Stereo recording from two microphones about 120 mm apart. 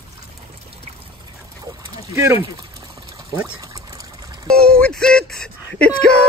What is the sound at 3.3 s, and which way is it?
Pour, 25° right (ahead or behind).